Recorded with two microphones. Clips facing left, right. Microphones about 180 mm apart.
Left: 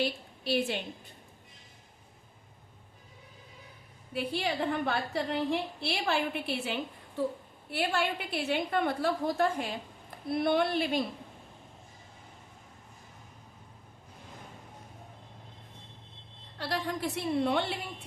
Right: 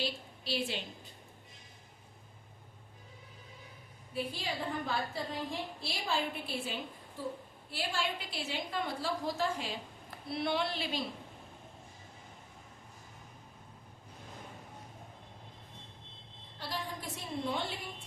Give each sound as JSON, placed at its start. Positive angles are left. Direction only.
{"t": 0.0, "sound": "a woman's voice", "side_deg": 55}
{"t": 4.1, "sound": "a woman's voice", "side_deg": 70}
{"t": 16.6, "sound": "a woman's voice", "side_deg": 70}